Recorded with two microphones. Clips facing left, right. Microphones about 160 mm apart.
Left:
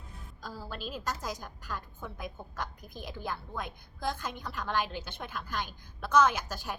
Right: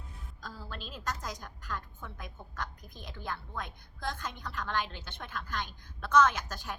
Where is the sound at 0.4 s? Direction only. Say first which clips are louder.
Left 4 dB; 5° left (ahead or behind).